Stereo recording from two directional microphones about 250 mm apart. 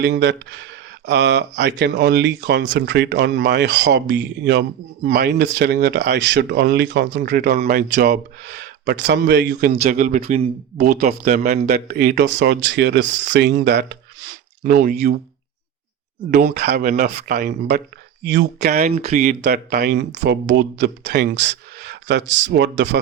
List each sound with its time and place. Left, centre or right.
0.0 s speech: right
9.7 s speech: right
16.3 s speech: right
18.7 s speech: right